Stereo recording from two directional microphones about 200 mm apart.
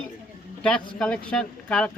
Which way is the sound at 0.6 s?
5° left (ahead or behind).